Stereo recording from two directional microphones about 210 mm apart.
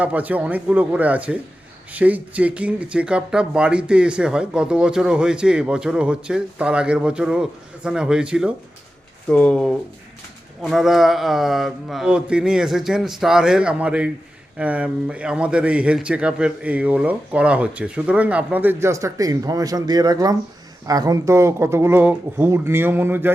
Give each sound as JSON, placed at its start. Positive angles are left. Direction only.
{"t": 0.0, "sound": "a man's voice", "side_deg": -5}